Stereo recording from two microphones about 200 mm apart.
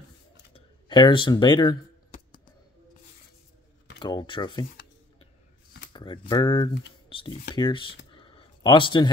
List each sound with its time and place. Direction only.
0.5 s speech: 25° left (ahead or behind)
4.0 s speech: 20° left (ahead or behind)
5.9 s speech: 25° left (ahead or behind)
8.1 s a sound: 25° left (ahead or behind)